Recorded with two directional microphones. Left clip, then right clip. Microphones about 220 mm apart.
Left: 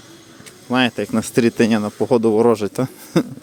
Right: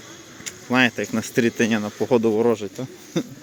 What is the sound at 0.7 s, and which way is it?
Speech, 15° left (ahead or behind).